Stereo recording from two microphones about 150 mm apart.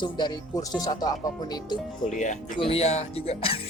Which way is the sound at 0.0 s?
30° left (ahead or behind).